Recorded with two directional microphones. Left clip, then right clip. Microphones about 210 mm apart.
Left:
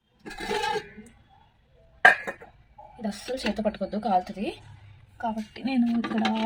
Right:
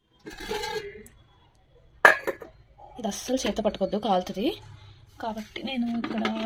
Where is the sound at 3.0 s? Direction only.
15° right (ahead or behind).